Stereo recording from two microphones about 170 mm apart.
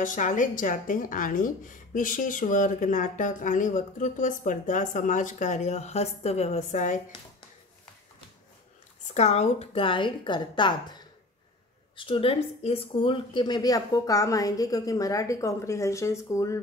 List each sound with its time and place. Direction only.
0.0 s a woman's voice: 50° left (ahead or behind)
9.0 s a woman's voice: 40° left (ahead or behind)
12.0 s a woman's voice: 30° left (ahead or behind)